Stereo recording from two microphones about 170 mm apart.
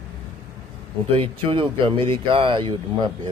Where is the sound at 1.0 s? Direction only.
30° right (ahead or behind).